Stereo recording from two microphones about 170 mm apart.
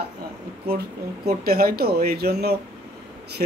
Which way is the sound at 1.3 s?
60° right (ahead or behind).